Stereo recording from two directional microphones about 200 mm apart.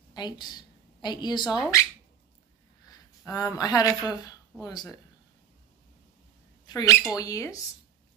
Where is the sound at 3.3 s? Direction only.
15° left (ahead or behind).